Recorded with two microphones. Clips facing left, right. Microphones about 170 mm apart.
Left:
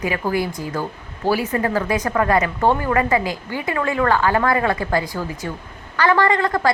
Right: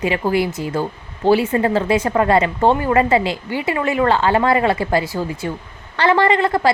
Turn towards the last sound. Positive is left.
turn(degrees=-25)  # may be behind; listen again after turning